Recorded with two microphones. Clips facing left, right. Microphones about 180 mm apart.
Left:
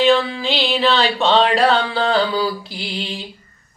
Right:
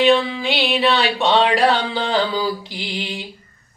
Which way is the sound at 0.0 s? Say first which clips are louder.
Even; 15° right (ahead or behind).